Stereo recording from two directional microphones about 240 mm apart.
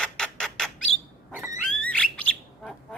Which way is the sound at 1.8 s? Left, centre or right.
Centre.